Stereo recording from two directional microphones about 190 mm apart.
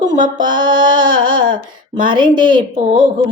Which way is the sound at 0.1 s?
45° right (ahead or behind).